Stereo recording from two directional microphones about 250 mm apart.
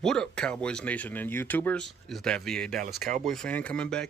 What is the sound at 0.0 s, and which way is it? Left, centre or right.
Speech, centre.